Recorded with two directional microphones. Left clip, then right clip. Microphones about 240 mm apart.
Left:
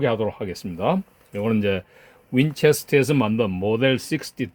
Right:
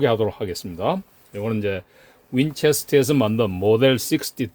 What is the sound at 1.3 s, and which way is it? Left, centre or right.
Speech, centre.